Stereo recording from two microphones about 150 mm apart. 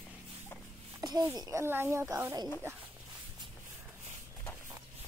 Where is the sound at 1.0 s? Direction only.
25° right (ahead or behind).